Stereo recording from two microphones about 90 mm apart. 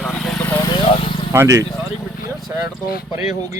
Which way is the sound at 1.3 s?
35° right (ahead or behind).